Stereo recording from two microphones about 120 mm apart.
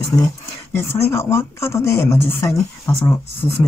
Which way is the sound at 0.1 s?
25° left (ahead or behind).